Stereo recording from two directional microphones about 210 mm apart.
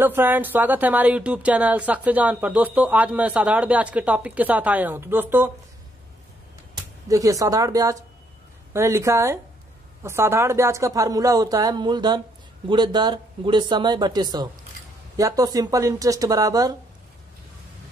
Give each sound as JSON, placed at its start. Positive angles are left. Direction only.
{"t": 0.0, "sound": "speech", "side_deg": -10}
{"t": 7.1, "sound": "speech", "side_deg": -15}